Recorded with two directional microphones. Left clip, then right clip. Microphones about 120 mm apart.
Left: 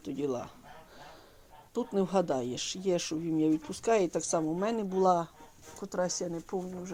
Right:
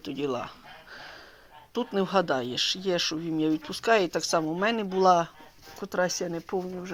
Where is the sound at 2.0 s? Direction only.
15° left (ahead or behind).